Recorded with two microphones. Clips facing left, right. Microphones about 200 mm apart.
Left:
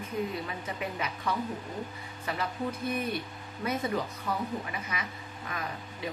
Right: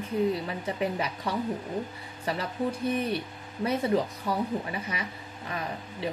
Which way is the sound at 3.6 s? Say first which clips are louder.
Right 5 dB; 30° right (ahead or behind).